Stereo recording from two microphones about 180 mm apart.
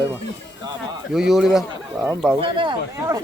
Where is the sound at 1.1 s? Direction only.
Centre (ahead or behind).